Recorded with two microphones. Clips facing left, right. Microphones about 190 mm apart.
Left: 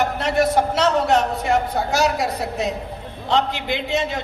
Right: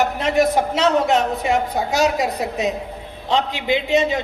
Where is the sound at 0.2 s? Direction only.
15° right (ahead or behind).